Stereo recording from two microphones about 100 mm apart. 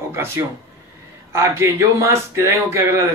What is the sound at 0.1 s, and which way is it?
A man's voice, 25° right (ahead or behind).